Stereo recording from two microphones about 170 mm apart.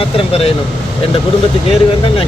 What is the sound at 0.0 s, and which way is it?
Speech, 35° left (ahead or behind).